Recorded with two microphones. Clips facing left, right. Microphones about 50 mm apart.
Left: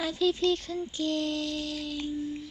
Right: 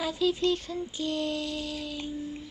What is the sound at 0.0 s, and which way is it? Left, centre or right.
Child singing, centre.